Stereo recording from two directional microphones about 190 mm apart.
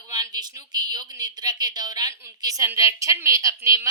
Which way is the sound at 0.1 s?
20° right (ahead or behind).